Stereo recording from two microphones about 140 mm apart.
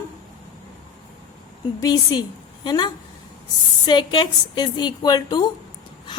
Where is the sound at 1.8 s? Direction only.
30° left (ahead or behind).